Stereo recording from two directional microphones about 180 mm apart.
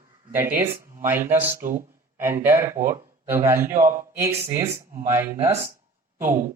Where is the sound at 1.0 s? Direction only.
10° right (ahead or behind).